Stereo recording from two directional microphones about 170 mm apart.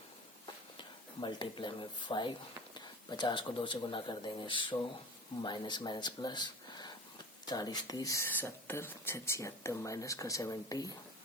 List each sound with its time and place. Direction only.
1.2 s speech: 25° left (ahead or behind)